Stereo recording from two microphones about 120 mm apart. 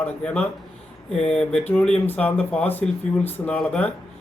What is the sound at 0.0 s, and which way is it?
Speech, 10° left (ahead or behind).